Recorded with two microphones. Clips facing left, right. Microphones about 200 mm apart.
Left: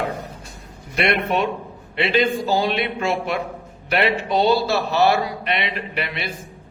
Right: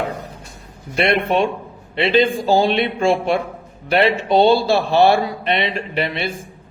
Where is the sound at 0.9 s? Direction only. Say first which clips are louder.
Right 3 dB; 30° right (ahead or behind).